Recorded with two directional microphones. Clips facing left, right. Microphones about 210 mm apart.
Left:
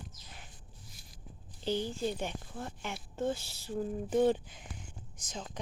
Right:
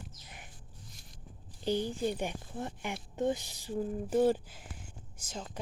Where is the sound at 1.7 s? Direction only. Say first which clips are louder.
Right 2 dB; 15° right (ahead or behind).